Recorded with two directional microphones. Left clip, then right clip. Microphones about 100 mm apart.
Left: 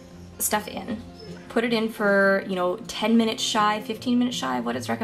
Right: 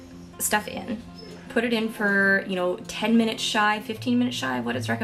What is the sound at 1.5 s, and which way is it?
A woman's voice, 15° left (ahead or behind).